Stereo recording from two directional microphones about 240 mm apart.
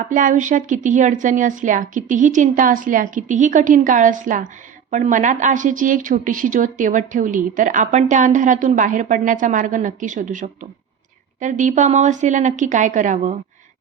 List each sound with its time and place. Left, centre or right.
0.0 s a woman's voice: right